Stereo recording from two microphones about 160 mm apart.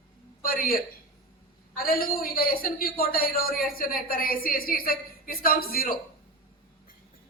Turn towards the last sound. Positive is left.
turn(degrees=65)  # may be behind; listen again after turning